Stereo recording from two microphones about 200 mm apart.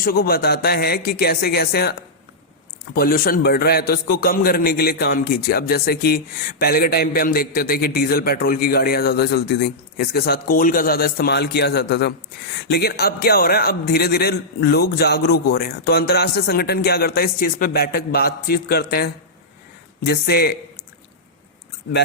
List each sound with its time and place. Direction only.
0.0 s a man's voice: 45° left (ahead or behind)